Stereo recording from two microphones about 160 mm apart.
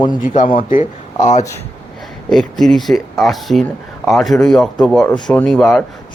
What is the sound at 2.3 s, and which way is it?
Speech, centre (ahead or behind).